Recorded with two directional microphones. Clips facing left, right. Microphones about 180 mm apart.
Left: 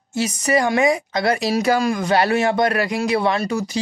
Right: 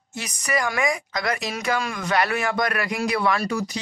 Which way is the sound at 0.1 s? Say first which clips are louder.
Left 8 dB; 30° left (ahead or behind).